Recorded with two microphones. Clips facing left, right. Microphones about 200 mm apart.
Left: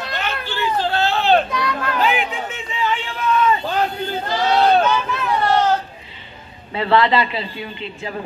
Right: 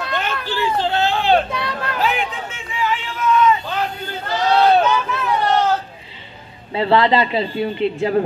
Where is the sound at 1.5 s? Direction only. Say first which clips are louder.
Left 2 dB; 30° right (ahead or behind).